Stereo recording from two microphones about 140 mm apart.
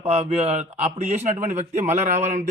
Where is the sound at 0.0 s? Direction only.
50° right (ahead or behind).